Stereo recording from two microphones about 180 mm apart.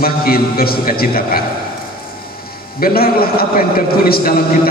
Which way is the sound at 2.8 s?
55° left (ahead or behind).